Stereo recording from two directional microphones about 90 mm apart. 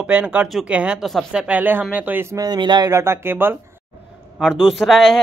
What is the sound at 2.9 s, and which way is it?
Speech, 30° right (ahead or behind).